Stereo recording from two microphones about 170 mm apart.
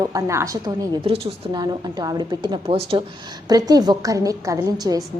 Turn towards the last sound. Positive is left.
turn(degrees=-20)  # may be behind; listen again after turning